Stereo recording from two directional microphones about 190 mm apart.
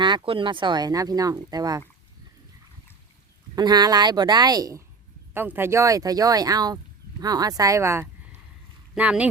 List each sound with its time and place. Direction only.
0.0 s speech: 25° right (ahead or behind)
3.5 s speech: 20° right (ahead or behind)